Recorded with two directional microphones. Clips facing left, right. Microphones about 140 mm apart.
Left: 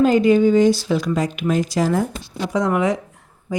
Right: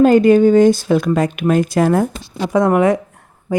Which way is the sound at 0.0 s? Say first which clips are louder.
Right 5 dB; 50° right (ahead or behind).